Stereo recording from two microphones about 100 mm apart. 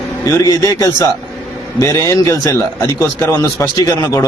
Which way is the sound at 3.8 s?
35° left (ahead or behind).